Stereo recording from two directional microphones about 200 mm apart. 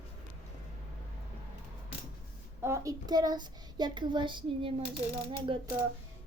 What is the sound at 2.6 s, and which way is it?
Speech, 15° right (ahead or behind).